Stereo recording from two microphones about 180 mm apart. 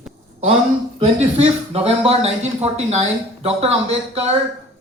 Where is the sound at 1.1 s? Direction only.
35° right (ahead or behind).